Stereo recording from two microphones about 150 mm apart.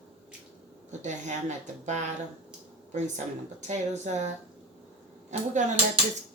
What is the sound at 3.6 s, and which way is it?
Speech, 50° right (ahead or behind).